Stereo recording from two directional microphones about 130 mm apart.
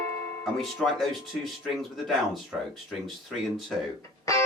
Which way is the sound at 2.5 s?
5° right (ahead or behind).